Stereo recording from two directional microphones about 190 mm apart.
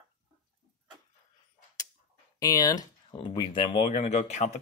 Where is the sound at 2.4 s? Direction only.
20° left (ahead or behind); by 4.5 s 35° left (ahead or behind).